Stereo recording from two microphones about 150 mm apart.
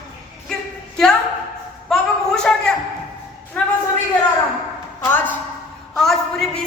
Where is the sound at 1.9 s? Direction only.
5° left (ahead or behind).